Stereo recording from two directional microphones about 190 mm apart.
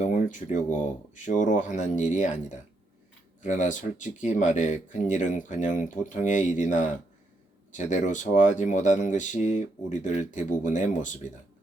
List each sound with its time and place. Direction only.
0.0 s speech: 40° left (ahead or behind)